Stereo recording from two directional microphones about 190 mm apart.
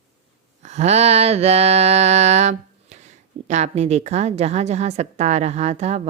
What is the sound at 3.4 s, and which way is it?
A woman's voice, 35° right (ahead or behind).